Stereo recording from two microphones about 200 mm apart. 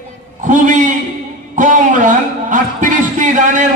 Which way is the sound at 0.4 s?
40° right (ahead or behind).